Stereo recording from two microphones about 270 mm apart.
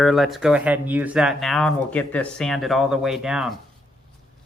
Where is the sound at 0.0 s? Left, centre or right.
Centre.